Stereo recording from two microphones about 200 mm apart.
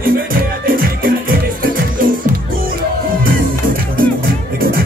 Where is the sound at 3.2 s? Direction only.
45° right (ahead or behind).